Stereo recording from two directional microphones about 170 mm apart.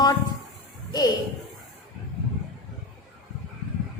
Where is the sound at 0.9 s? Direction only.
20° left (ahead or behind).